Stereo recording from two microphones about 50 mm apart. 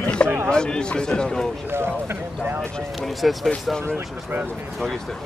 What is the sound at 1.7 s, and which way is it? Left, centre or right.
Speech, right.